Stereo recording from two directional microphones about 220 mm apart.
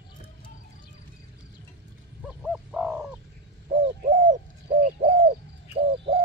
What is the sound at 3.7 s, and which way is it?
Bird, 30° right (ahead or behind).